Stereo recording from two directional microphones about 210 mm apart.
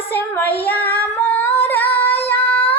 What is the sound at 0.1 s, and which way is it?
Female singing, 10° left (ahead or behind).